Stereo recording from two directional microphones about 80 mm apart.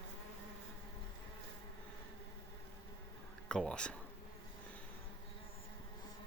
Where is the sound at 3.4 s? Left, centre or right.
Centre.